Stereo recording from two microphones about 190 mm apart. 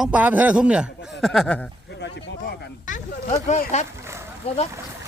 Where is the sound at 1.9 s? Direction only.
65° left (ahead or behind).